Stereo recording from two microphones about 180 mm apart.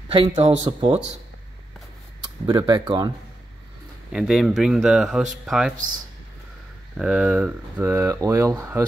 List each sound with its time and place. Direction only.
0.1 s speech: 30° right (ahead or behind)
2.4 s speech: 25° right (ahead or behind)
4.1 s speech: centre (ahead or behind)
7.0 s speech: 5° right (ahead or behind)